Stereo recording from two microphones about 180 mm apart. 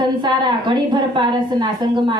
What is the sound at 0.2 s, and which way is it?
A woman's voice, 25° right (ahead or behind).